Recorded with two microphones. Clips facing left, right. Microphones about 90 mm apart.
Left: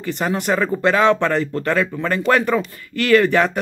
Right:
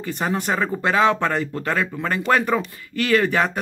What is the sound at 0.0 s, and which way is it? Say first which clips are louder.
Speech: left 2 dB; 25° right (ahead or behind).